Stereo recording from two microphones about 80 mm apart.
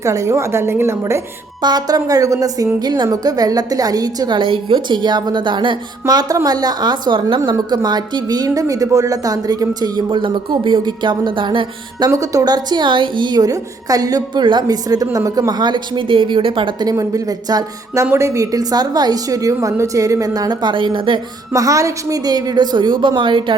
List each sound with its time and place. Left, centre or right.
0.0 s a woman's voice: right
1.6 s a woman's voice: right
2.7 s a woman's voice: right
4.4 s a woman's voice: right
7.7 s speech: right
8.4 s speech: right
12.1 s a woman's voice: right
14.4 s a woman's voice: right
15.1 s a woman's voice: right
16.9 s a woman's voice: right
17.9 s a woman's voice: right
21.5 s speech: right